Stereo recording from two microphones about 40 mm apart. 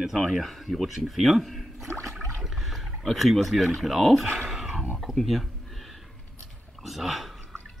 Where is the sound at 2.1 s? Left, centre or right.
Centre.